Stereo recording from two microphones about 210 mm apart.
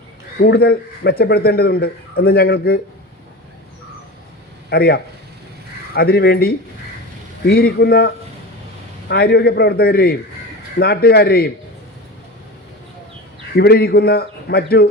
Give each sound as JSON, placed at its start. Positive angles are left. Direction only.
{"t": 0.4, "sound": "a man's voice", "side_deg": 50}
{"t": 4.7, "sound": "a man's voice", "side_deg": 50}
{"t": 13.6, "sound": "a man's voice", "side_deg": 50}